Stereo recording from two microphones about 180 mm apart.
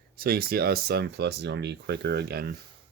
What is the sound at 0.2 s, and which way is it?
Speech, 55° right (ahead or behind).